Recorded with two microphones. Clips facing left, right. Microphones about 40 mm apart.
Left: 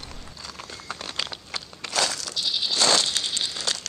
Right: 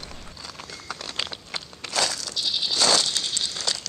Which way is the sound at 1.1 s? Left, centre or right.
Centre.